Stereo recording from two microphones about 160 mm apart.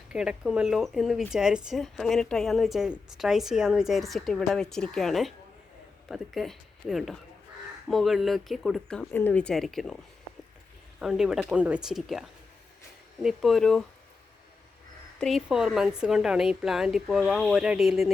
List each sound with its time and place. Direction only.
0.1 s speech: 5° right (ahead or behind)
11.0 s speech: centre (ahead or behind)
13.2 s speech: centre (ahead or behind)
15.2 s speech: centre (ahead or behind)